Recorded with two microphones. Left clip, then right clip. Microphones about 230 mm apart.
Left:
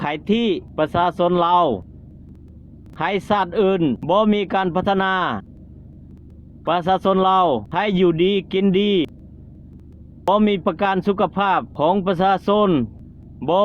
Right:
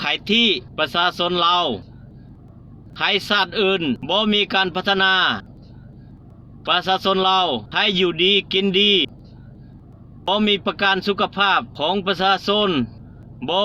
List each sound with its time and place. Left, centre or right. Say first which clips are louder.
0.3 s speech: right 4 dB; left
3.1 s speech: right 1 dB; left
6.7 s speech: left 1 dB; left
10.2 s speech: left 2 dB; left